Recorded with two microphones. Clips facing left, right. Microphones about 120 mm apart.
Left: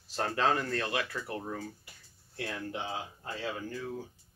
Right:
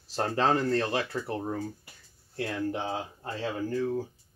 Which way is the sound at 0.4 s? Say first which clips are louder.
Right 5 dB; 30° right (ahead or behind).